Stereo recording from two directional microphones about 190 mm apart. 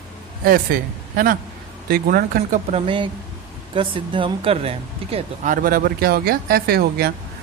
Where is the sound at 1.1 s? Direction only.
50° right (ahead or behind).